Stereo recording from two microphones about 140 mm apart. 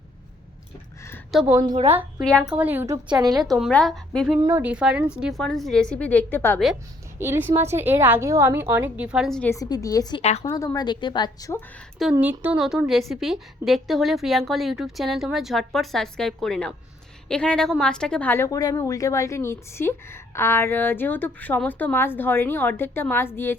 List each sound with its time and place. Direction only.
1.3 s a woman's voice: centre (ahead or behind)
1.7 s a woman's voice: 50° right (ahead or behind)
2.2 s a woman's voice: 5° left (ahead or behind)
2.5 s a woman's voice: 10° right (ahead or behind); by 3.4 s 30° right (ahead or behind)
3.4 s a woman's voice: centre (ahead or behind)
4.5 s a woman's voice: 10° right (ahead or behind); by 6.6 s 15° left (ahead or behind)
7.2 s a woman's voice: 15° right (ahead or behind)
9.6 s a woman's voice: 25° left (ahead or behind)
10.2 s a woman's voice: 55° left (ahead or behind)
10.4 s a woman's voice: 25° left (ahead or behind)
12.2 s a woman's voice: 10° right (ahead or behind); by 23.6 s 15° left (ahead or behind)